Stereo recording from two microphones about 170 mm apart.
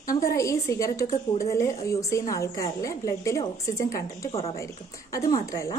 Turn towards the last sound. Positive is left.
turn(degrees=20)  # may be behind; listen again after turning